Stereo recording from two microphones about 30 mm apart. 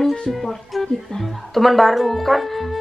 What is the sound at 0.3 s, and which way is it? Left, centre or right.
Speech, centre.